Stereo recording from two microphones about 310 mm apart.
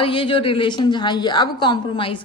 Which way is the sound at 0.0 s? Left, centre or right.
Centre.